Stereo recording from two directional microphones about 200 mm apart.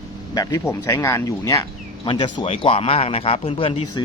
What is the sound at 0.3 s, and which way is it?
A man's voice, 15° left (ahead or behind).